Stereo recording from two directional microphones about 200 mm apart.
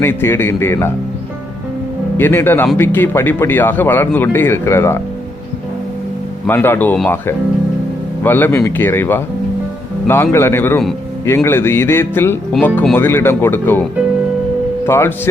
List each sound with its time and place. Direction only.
0.0 s speech: 10° left (ahead or behind)
2.1 s speech: 10° left (ahead or behind)
6.5 s speech: 10° left (ahead or behind)
14.8 s speech: 10° left (ahead or behind)